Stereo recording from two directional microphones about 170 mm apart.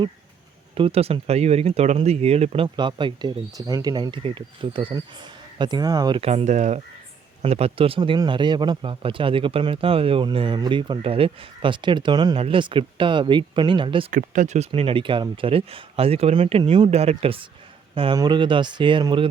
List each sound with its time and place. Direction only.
0.8 s speech: 35° right (ahead or behind)
14.1 s speech: 50° right (ahead or behind)
14.7 s speech: 30° right (ahead or behind)